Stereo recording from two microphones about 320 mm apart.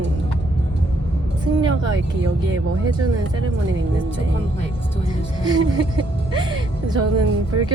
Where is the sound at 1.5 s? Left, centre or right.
Right.